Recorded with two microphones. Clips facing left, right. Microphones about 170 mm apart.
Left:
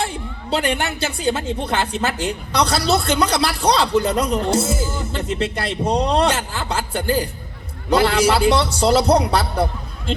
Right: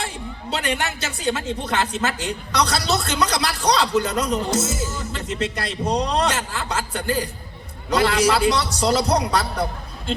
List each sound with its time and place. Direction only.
0.0 s speech: 30° left (ahead or behind)